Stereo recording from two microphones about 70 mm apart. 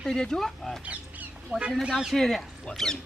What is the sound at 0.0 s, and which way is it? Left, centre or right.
Speech, centre.